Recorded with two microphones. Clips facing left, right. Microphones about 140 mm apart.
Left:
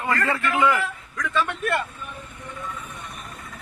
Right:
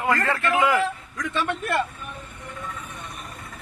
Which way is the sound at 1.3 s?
25° right (ahead or behind).